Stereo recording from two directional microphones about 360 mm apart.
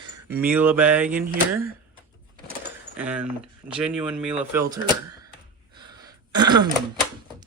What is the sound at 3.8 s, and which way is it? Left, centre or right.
Speech, centre.